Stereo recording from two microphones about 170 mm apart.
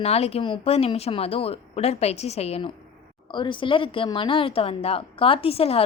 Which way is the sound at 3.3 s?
30° left (ahead or behind).